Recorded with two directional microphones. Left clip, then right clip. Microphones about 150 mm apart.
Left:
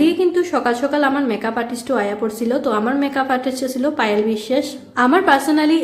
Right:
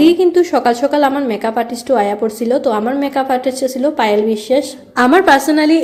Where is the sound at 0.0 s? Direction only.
25° right (ahead or behind).